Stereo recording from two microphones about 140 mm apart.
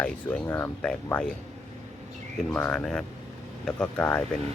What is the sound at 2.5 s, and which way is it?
Speech, 10° left (ahead or behind).